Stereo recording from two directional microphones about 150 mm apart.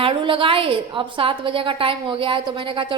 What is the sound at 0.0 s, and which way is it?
A woman's voice, 35° right (ahead or behind).